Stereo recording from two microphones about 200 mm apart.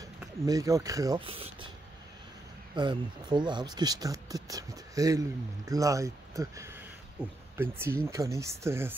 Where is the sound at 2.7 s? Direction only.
25° right (ahead or behind).